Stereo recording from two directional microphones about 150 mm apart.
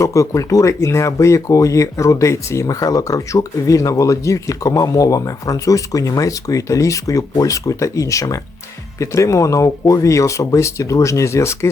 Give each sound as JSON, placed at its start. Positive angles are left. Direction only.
{"t": 0.0, "sound": "speech", "side_deg": 20}